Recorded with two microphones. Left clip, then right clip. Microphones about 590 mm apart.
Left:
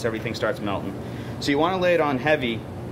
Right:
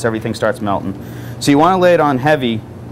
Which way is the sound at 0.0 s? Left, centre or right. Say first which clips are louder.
Right 8 dB; right.